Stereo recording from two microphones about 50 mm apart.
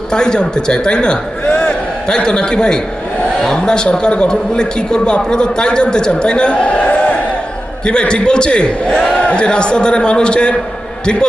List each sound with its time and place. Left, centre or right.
0.1 s a man's voice: centre
1.5 s a sound: left
2.0 s a man's voice: centre